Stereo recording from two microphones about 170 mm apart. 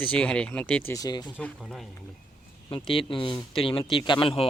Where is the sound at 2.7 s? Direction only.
30° left (ahead or behind).